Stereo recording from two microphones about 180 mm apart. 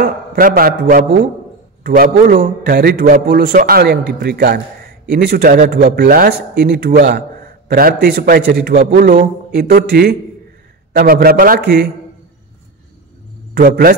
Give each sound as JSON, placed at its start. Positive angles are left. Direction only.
{"t": 0.0, "sound": "a man's voice", "side_deg": -55}
{"t": 6.0, "sound": "a man's voice", "side_deg": -55}
{"t": 13.6, "sound": "a man's voice", "side_deg": -55}